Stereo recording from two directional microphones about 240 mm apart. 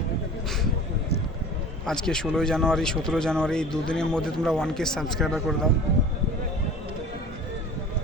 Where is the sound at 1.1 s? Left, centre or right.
Left.